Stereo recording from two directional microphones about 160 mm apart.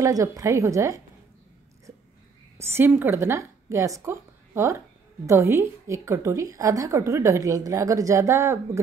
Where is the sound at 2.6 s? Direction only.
15° right (ahead or behind).